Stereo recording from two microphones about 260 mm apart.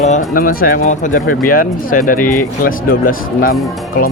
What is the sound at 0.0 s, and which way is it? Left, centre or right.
Speech, left.